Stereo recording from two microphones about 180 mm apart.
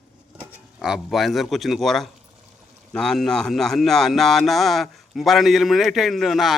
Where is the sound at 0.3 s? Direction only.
5° right (ahead or behind).